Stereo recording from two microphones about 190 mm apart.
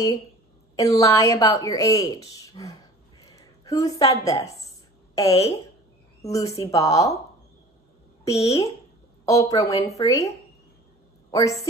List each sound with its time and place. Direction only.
0.7 s a woman's voice: 20° left (ahead or behind)
3.3 s a sound: 15° left (ahead or behind)
5.3 s speech: 30° left (ahead or behind)
6.2 s a woman's voice: 15° left (ahead or behind)
8.3 s a woman's voice: 15° left (ahead or behind)